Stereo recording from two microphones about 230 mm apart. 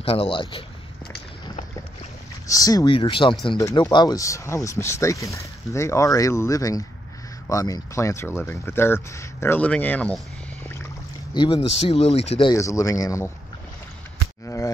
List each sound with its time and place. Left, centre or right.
0.0 s speech: left
2.4 s speech: centre
11.3 s speech: centre
14.4 s a sound: centre